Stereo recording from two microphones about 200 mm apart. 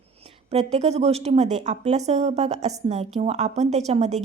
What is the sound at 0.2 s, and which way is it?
A woman's voice, 30° right (ahead or behind).